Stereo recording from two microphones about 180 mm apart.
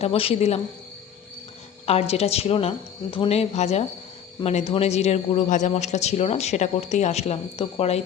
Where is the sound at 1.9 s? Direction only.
35° left (ahead or behind).